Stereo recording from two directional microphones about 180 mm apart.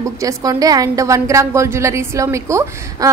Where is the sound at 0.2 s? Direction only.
20° right (ahead or behind).